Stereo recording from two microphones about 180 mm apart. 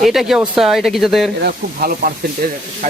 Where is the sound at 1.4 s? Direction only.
55° right (ahead or behind).